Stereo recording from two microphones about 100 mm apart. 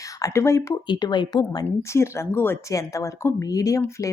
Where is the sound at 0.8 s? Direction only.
50° left (ahead or behind).